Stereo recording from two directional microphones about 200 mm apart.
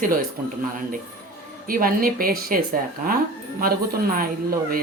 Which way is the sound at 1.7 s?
45° right (ahead or behind).